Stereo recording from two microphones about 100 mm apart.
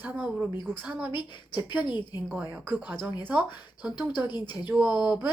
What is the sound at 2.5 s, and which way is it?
Speech, 15° right (ahead or behind).